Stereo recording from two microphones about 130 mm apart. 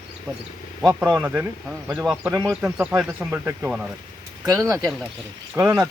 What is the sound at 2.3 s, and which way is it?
Speech, 30° right (ahead or behind).